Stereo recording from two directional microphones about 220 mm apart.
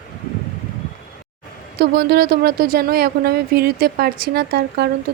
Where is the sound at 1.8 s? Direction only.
45° right (ahead or behind).